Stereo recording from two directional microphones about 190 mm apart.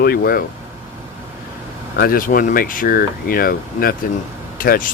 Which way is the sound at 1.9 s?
50° left (ahead or behind).